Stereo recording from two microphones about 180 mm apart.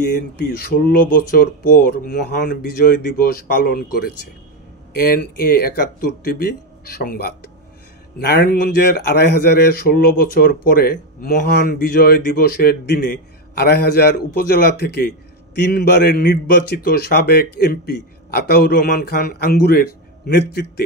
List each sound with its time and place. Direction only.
0.4 s speech: 55° left (ahead or behind)